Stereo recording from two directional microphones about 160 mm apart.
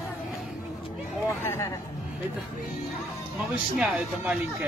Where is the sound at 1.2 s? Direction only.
15° left (ahead or behind).